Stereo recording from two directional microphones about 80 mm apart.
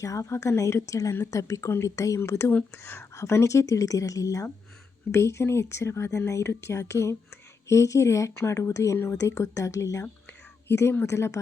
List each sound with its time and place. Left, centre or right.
0.0 s a woman's voice: left
5.1 s speech: left
10.7 s speech: left